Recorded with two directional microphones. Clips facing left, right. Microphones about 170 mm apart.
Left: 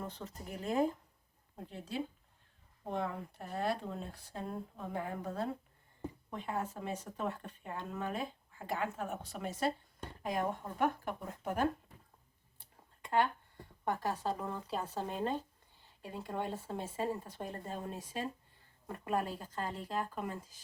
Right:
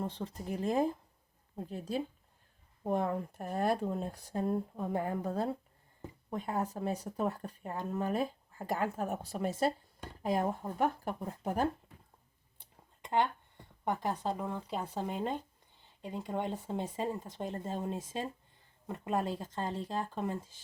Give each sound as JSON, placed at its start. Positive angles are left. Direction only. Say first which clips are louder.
{"t": 0.0, "sound": "speech", "louder": "right 6 dB", "side_deg": -35}
{"t": 13.8, "sound": "speech", "louder": "right 2 dB", "side_deg": -15}